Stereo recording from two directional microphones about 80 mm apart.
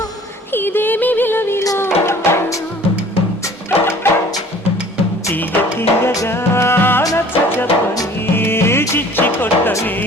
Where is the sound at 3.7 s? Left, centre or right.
Left.